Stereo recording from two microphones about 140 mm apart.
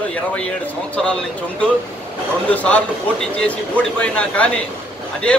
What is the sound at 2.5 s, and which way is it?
A man's voice, 10° left (ahead or behind).